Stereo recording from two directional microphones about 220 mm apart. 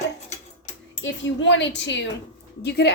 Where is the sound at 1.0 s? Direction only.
55° left (ahead or behind).